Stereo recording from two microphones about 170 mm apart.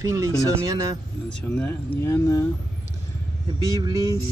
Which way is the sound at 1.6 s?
10° left (ahead or behind).